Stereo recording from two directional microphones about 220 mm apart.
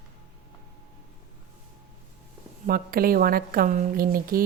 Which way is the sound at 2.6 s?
40° right (ahead or behind).